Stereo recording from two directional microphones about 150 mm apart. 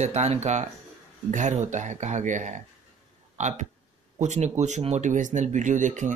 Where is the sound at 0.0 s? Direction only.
45° right (ahead or behind).